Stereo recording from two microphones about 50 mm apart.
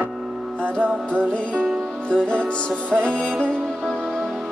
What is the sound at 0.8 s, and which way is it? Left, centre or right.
Music, left.